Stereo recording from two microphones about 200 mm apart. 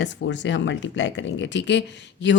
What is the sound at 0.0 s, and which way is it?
Speech, 65° left (ahead or behind).